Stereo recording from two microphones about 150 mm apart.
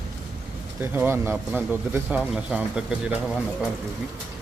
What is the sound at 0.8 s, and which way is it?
Speech, 15° right (ahead or behind).